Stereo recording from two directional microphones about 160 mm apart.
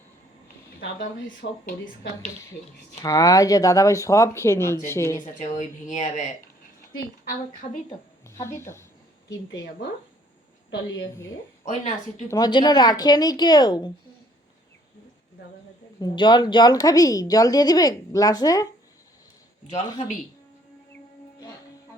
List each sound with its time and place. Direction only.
1.4 s speech: 80° left
3.0 s a woman's voice: 20° left (ahead or behind)
5.2 s speech: 50° left (ahead or behind)
8.3 s speech: 15° left (ahead or behind)
12.3 s a woman's voice: 25° left (ahead or behind)
16.0 s a woman's voice: 25° left (ahead or behind)
19.6 s speech: 45° left (ahead or behind)